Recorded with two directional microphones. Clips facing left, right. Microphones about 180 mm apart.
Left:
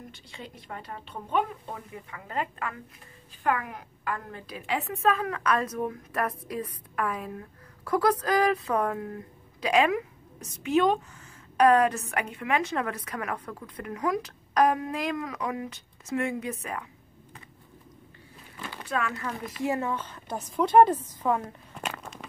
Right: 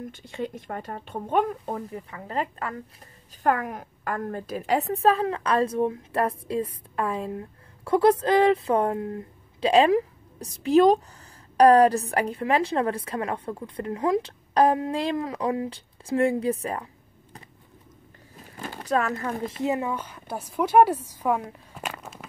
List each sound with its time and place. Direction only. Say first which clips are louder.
0.3 s speech: right 10 dB; 45° right (ahead or behind)
3.4 s a woman's voice: right 4 dB; 45° right (ahead or behind)
18.4 s a sound: right 4 dB; 40° right (ahead or behind)
19.4 s speech: right 1 dB; 25° right (ahead or behind); by 22.2 s 5° right (ahead or behind)